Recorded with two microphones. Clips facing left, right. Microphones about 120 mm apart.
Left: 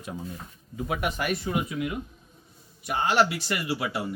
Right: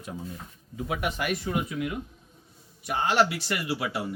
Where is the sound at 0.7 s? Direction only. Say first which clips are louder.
Left 1 dB; 50° left (ahead or behind); by 1.5 s 35° left (ahead or behind).